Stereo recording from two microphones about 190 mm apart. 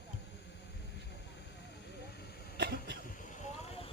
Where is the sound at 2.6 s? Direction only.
60° right (ahead or behind).